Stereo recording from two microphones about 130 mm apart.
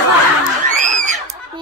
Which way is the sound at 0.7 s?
70° right (ahead or behind).